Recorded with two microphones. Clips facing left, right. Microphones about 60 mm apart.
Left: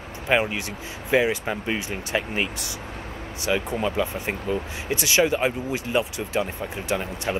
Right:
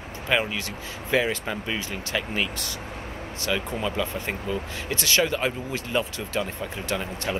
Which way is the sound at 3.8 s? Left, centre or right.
Centre.